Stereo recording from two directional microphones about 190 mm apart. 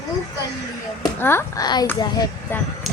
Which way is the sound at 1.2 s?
10° left (ahead or behind).